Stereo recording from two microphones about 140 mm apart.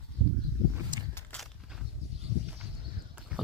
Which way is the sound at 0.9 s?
30° right (ahead or behind).